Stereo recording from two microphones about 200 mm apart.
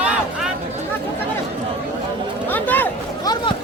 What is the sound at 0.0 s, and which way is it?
Chatter, 5° right (ahead or behind).